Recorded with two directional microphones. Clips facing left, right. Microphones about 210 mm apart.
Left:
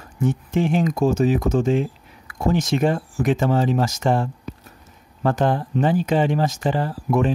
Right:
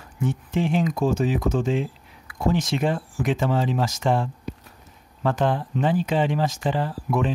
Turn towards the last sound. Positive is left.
turn(degrees=45)  # may be behind; listen again after turning